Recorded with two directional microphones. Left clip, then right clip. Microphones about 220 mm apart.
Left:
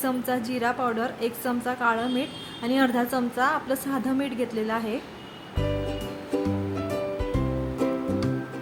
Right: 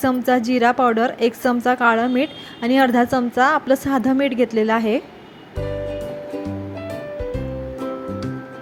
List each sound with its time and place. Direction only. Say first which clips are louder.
0.0 s a woman's voice: right 9 dB; 25° right (ahead or behind)